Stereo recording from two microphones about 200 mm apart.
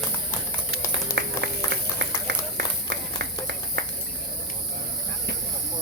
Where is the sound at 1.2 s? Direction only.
60° right (ahead or behind).